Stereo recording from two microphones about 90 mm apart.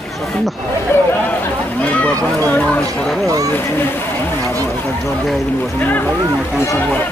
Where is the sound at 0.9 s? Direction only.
25° left (ahead or behind).